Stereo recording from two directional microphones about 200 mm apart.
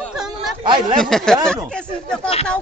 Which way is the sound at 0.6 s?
25° right (ahead or behind).